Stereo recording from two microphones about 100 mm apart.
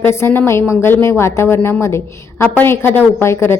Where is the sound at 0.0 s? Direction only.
25° left (ahead or behind).